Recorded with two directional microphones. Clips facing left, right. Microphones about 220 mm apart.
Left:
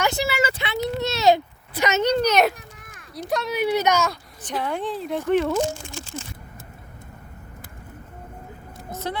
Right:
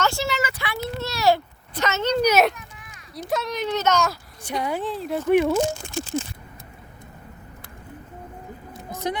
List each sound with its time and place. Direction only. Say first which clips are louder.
0.0 s a sound: left 2 dB; 15° left (ahead or behind)
1.7 s speech: left 3 dB; 15° left (ahead or behind)
2.2 s speech: right 3 dB; 5° right (ahead or behind)
2.6 s a sound: even; 45° left (ahead or behind)
3.2 s speech: left 1 dB; centre (ahead or behind)
3.6 s speech: left 3 dB; 10° left (ahead or behind)
4.0 s speech: even; centre (ahead or behind)
5.3 s speech: right 2 dB; 10° right (ahead or behind)